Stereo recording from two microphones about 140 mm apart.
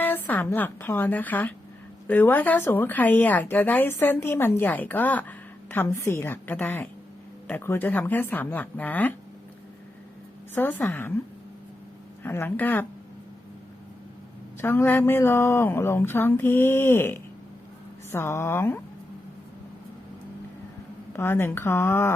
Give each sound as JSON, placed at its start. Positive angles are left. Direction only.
{"t": 0.0, "sound": "a woman's voice", "side_deg": 15}
{"t": 10.5, "sound": "a woman's voice", "side_deg": 15}
{"t": 12.2, "sound": "a woman's voice", "side_deg": 15}
{"t": 14.6, "sound": "a woman's voice", "side_deg": 15}
{"t": 21.1, "sound": "a woman's voice", "side_deg": 15}